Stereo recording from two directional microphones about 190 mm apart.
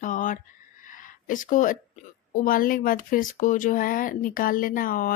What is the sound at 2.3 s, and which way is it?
Speech, 50° left (ahead or behind).